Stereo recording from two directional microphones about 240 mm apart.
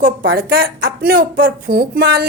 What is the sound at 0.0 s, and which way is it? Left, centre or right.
Speech, right.